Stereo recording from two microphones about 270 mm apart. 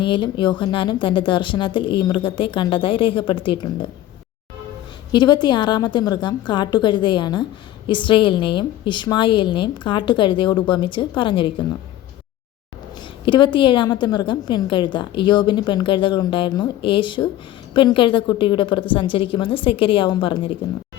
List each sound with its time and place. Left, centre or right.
0.0 s a woman's voice: centre
5.1 s a woman's voice: centre
13.2 s a woman's voice: centre